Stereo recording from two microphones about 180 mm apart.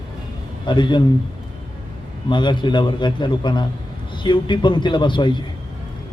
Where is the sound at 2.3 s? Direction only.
25° left (ahead or behind).